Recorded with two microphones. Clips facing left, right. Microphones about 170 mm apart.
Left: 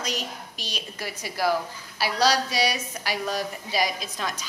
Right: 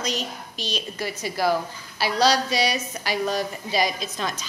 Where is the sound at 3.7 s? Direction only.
25° right (ahead or behind).